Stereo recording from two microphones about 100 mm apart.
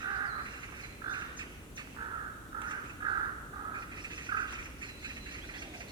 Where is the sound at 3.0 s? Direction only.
50° right (ahead or behind).